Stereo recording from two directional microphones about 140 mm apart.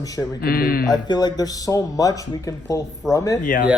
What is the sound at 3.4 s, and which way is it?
Speech, 80° left.